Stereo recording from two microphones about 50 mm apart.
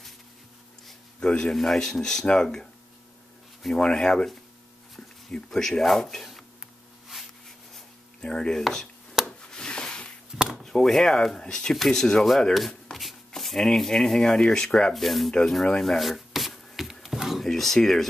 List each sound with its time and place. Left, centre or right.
1.2 s speech: centre
3.7 s speech: centre
5.3 s speech: centre
8.2 s speech: centre
9.4 s a sound: centre
10.3 s chop: centre
10.6 s speech: centre
15.8 s wood: centre
17.0 s a sound: centre
17.5 s speech: centre